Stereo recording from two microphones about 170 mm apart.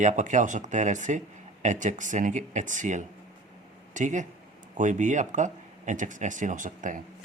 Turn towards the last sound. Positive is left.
turn(degrees=-50)  # may be behind; listen again after turning